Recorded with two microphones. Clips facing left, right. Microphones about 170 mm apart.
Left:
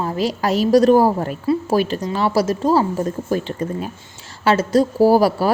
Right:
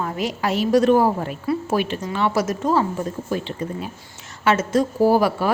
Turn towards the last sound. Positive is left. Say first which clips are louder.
# left 3 dB
turn(degrees=35)  # may be behind; listen again after turning